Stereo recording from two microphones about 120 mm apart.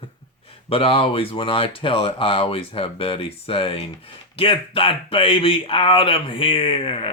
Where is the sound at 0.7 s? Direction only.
50° left (ahead or behind).